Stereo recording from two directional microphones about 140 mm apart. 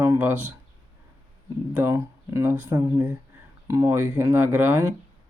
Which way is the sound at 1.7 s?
15° right (ahead or behind).